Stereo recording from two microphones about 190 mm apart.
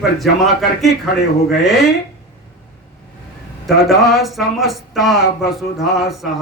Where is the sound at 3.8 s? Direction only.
Centre (ahead or behind).